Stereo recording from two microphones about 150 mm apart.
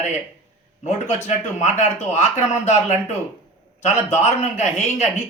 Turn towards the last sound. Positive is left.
turn(degrees=50)  # may be behind; listen again after turning